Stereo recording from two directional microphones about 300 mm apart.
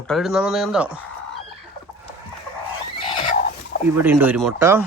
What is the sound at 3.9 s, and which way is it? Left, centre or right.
Speech, centre.